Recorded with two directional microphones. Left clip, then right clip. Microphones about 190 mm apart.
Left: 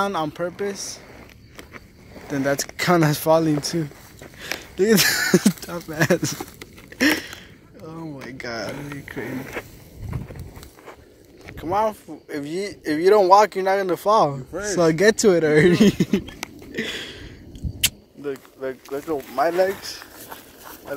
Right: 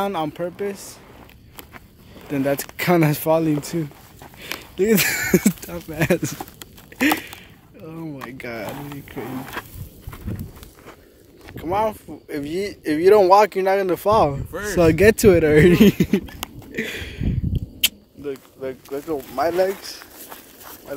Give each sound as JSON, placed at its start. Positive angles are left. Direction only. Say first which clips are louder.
{"t": 0.0, "sound": "speech", "louder": "even", "side_deg": -20}
{"t": 2.2, "sound": "speech", "louder": "right 1 dB", "side_deg": -25}
{"t": 7.0, "sound": "a sound", "louder": "even", "side_deg": -20}
{"t": 11.5, "sound": "speech", "louder": "even", "side_deg": -30}
{"t": 16.7, "sound": "a sound", "louder": "even", "side_deg": -25}
{"t": 18.2, "sound": "speech", "louder": "even", "side_deg": -20}